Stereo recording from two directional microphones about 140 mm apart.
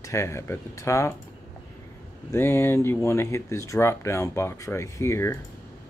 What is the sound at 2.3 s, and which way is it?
Speech, 15° left (ahead or behind).